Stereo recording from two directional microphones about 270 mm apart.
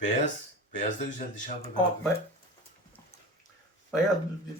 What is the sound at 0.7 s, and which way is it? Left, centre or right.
Speech, left.